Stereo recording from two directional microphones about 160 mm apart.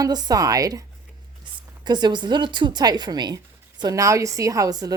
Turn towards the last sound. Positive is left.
turn(degrees=-25)  # may be behind; listen again after turning